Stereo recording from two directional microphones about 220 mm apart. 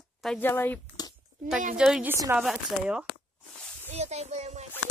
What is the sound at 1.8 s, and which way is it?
Speech, 5° right (ahead or behind).